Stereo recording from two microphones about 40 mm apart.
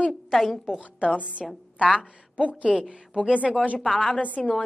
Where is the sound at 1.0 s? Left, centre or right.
Right.